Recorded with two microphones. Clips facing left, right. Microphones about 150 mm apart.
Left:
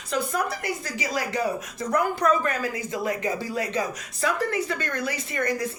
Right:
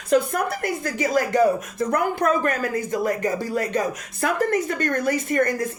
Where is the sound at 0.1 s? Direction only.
55° right (ahead or behind).